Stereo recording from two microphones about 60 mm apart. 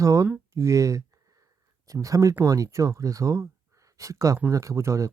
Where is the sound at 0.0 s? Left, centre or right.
Right.